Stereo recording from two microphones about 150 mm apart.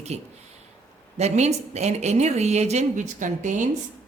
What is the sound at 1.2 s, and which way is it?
A woman's voice, 45° right (ahead or behind).